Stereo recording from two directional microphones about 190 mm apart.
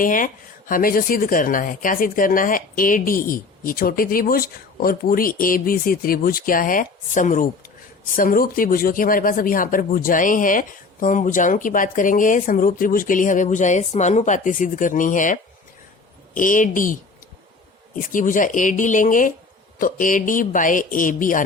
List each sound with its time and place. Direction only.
0.0 s speech: 45° left (ahead or behind)